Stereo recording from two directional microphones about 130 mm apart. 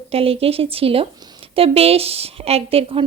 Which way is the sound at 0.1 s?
45° right (ahead or behind).